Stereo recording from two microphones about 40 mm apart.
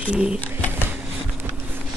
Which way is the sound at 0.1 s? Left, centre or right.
Right.